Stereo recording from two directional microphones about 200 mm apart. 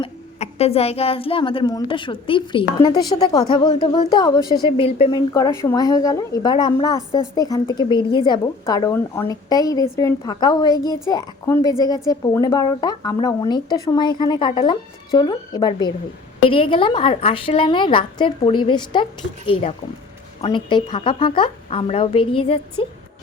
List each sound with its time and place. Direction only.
0.0 s a woman's voice: 30° left (ahead or behind)
5.3 s a woman's voice: 15° left (ahead or behind)
20.4 s a woman's voice: 25° left (ahead or behind)